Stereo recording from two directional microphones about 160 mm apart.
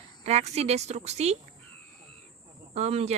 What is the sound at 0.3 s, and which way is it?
A woman's voice, 40° right (ahead or behind).